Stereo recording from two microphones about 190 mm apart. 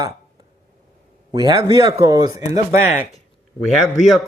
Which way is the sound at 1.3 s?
20° right (ahead or behind).